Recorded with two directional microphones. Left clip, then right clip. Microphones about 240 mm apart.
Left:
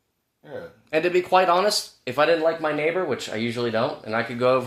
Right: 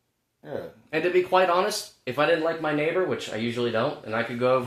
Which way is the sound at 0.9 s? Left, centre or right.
Centre.